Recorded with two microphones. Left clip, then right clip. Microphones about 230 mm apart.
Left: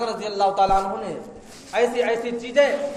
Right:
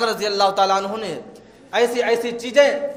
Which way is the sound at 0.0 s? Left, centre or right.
Right.